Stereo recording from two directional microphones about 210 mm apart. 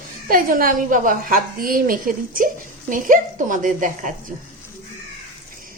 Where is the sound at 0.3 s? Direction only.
40° right (ahead or behind).